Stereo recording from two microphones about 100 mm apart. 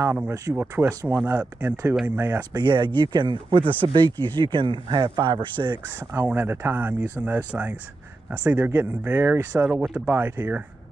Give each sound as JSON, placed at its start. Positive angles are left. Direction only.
{"t": 0.0, "sound": "speech", "side_deg": -15}
{"t": 2.5, "sound": "speech", "side_deg": -50}
{"t": 3.9, "sound": "speech", "side_deg": -45}
{"t": 5.9, "sound": "speech", "side_deg": -20}